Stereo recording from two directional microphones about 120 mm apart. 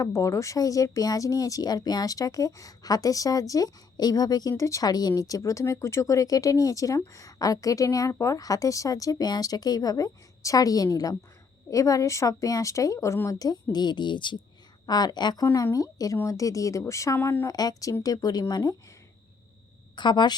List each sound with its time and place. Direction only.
0.0 s speech: 25° left (ahead or behind)
17.4 s speech: 30° left (ahead or behind)
20.0 s speech: 40° left (ahead or behind)